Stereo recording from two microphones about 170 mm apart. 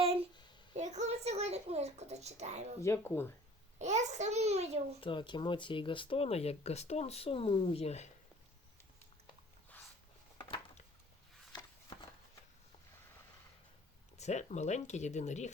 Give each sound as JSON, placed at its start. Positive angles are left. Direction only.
{"t": 0.0, "sound": "a sound", "side_deg": -35}
{"t": 0.7, "sound": "speech", "side_deg": -45}
{"t": 2.8, "sound": "speech", "side_deg": 15}
{"t": 3.8, "sound": "a child's voice", "side_deg": -45}
{"t": 4.9, "sound": "speech", "side_deg": 30}
{"t": 14.2, "sound": "speech", "side_deg": 40}